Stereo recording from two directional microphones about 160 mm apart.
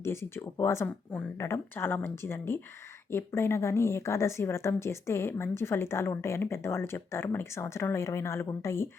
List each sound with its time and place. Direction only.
0.0 s a woman's voice: 15° left (ahead or behind)